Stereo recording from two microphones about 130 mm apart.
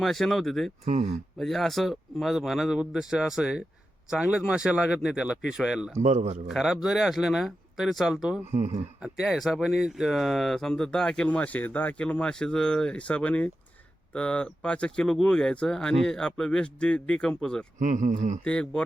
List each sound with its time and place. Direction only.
0.0 s speech: centre (ahead or behind)
0.9 s a man's voice: 55° right (ahead or behind)
1.4 s speech: centre (ahead or behind)
6.0 s a man's voice: 60° right (ahead or behind)
6.5 s speech: 5° right (ahead or behind)
8.5 s a man's voice: 60° right (ahead or behind)
9.0 s speech: 5° right (ahead or behind)
17.7 s speech: 80° right
18.4 s speech: 5° left (ahead or behind)